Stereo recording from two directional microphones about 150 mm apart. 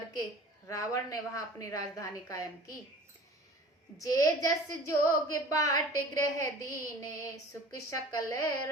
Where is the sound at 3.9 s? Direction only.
25° left (ahead or behind).